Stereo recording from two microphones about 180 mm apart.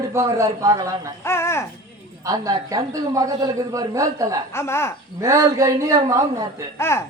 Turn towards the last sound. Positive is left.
turn(degrees=15)  # may be behind; listen again after turning